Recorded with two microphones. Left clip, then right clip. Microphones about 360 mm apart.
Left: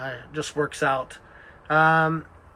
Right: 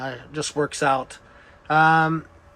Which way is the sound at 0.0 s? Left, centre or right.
Centre.